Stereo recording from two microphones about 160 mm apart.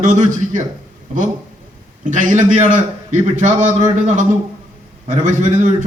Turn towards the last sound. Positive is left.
turn(degrees=-50)  # may be behind; listen again after turning